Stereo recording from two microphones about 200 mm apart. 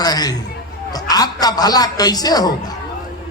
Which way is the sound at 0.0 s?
20° left (ahead or behind).